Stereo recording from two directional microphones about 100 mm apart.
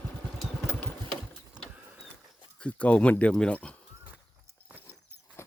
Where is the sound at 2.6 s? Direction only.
15° left (ahead or behind).